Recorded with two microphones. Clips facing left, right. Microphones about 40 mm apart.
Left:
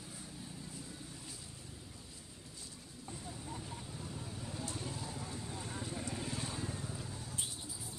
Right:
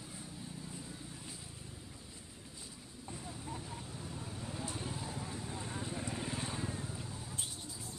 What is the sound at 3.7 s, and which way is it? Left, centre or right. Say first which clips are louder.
Vehicle: right 1 dB; centre.